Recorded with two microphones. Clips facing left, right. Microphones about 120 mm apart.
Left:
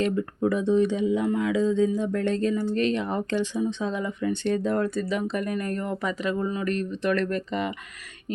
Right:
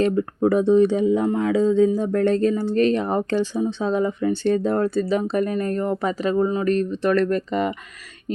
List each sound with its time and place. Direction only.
0.0 s speech: 40° right (ahead or behind)